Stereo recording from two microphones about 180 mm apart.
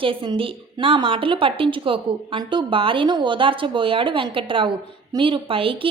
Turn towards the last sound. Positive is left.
turn(degrees=-30)  # may be behind; listen again after turning